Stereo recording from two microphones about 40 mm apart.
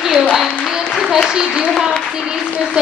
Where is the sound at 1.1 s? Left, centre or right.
Centre.